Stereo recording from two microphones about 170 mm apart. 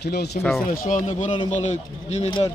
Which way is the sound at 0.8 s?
50° left (ahead or behind).